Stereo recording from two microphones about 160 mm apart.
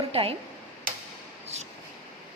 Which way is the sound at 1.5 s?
45° right (ahead or behind).